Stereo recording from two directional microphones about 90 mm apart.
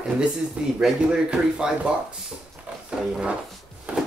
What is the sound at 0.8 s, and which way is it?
Speech, 10° right (ahead or behind).